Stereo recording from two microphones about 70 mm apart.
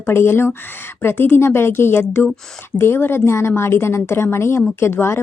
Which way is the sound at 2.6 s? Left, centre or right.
Left.